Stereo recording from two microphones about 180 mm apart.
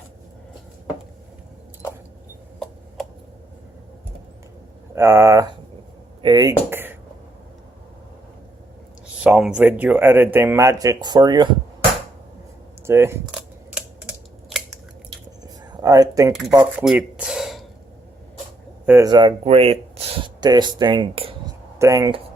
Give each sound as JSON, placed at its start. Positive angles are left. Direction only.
{"t": 4.9, "sound": "speech", "side_deg": -15}
{"t": 6.7, "sound": "a sound", "side_deg": -10}
{"t": 9.2, "sound": "speech", "side_deg": -5}
{"t": 12.8, "sound": "speech", "side_deg": -15}
{"t": 13.7, "sound": "typing", "side_deg": -5}
{"t": 15.4, "sound": "a sound", "side_deg": -20}
{"t": 16.7, "sound": "a sound", "side_deg": -5}
{"t": 18.9, "sound": "speech", "side_deg": -20}
{"t": 21.8, "sound": "speech", "side_deg": -15}